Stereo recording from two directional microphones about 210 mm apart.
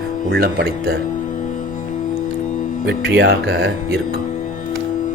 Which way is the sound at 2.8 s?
55° right (ahead or behind).